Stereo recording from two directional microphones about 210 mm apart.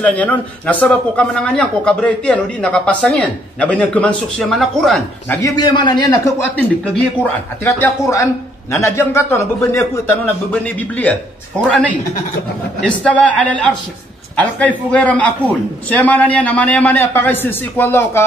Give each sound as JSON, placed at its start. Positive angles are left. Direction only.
{"t": 0.0, "sound": "a man's voice", "side_deg": 5}
{"t": 5.4, "sound": "a man's voice", "side_deg": 20}
{"t": 6.5, "sound": "a man's voice", "side_deg": 5}
{"t": 12.8, "sound": "a man's voice", "side_deg": 5}